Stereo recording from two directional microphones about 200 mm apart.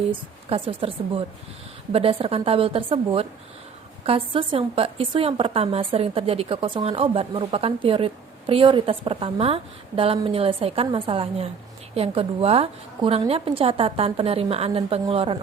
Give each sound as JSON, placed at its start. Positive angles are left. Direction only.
{"t": 0.1, "sound": "a woman's voice", "side_deg": -25}